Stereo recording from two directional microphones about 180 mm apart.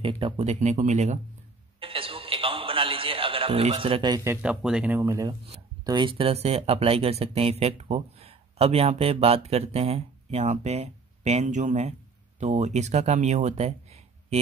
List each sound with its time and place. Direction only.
0.0 s speech: 35° right (ahead or behind)
1.8 s a sound: 30° right (ahead or behind); by 5.0 s 5° right (ahead or behind)
5.0 s speech: 20° right (ahead or behind); by 13.7 s 40° right (ahead or behind)